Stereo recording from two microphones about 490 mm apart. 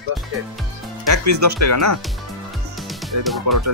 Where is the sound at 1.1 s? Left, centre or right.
Right.